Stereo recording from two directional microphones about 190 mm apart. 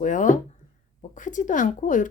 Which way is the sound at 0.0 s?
45° left (ahead or behind).